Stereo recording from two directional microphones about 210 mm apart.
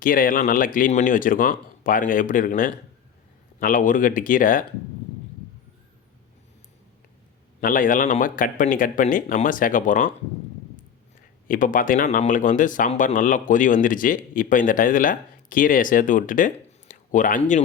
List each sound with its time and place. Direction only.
0.0 s speech: 40° left (ahead or behind)
7.6 s speech: 40° left (ahead or behind)
11.4 s speech: 40° left (ahead or behind)